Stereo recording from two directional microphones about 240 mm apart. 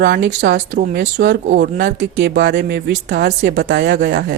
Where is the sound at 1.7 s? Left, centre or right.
Right.